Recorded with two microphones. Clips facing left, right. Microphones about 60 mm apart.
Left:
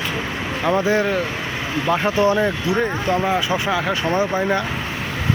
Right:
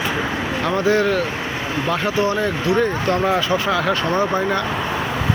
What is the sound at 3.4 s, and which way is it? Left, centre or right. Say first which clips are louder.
Speech: right 1 dB; centre.